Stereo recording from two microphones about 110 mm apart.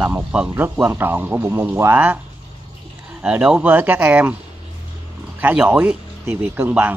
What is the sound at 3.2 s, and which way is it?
Speech, 10° right (ahead or behind).